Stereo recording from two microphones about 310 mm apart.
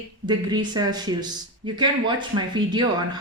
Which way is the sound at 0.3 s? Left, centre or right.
Centre.